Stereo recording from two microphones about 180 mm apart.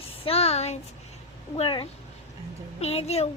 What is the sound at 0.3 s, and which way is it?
A child's voice, 35° left (ahead or behind).